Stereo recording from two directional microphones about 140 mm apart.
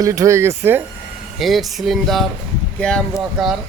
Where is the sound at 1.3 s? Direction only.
Centre (ahead or behind).